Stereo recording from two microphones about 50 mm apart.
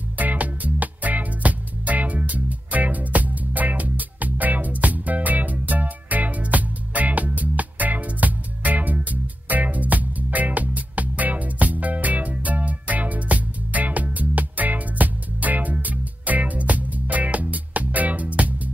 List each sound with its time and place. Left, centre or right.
0.2 s music: right